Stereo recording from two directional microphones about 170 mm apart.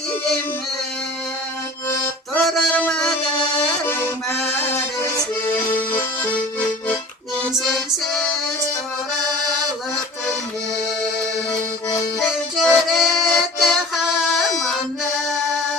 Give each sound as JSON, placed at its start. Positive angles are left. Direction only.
{"t": 2.5, "sound": "music", "side_deg": 5}
{"t": 3.8, "sound": "accordion", "side_deg": 10}
{"t": 7.6, "sound": "music", "side_deg": 0}
{"t": 12.6, "sound": "music", "side_deg": 0}